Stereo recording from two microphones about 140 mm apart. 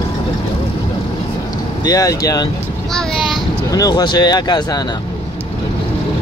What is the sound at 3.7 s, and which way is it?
Speech, 25° left (ahead or behind).